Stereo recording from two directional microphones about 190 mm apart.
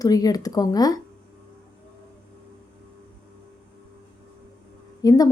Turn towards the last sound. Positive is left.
turn(degrees=20)  # may be behind; listen again after turning